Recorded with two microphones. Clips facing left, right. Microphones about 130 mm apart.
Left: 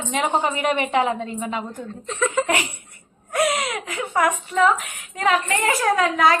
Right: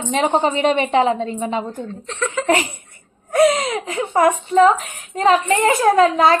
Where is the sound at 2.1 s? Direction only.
10° left (ahead or behind).